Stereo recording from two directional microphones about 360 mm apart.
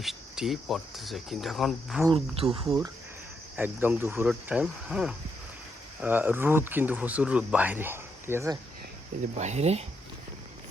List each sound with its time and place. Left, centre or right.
0.0 s speech: centre
2.0 s speech: centre
9.4 s speech: centre